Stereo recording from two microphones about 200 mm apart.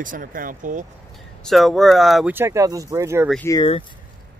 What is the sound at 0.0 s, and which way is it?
Speech, 45° right (ahead or behind).